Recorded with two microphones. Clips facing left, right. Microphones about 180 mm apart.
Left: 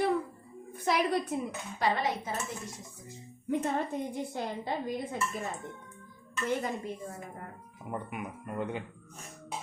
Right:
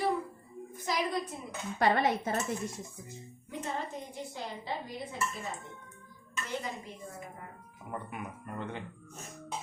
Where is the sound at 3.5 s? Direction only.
55° left (ahead or behind).